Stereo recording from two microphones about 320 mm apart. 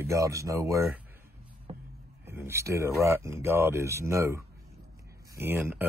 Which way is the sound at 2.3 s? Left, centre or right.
Centre.